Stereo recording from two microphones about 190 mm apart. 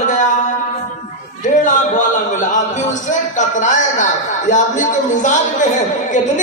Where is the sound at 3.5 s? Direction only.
40° left (ahead or behind).